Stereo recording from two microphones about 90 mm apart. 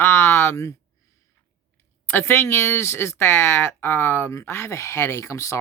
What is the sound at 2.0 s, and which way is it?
Speech, 25° left (ahead or behind).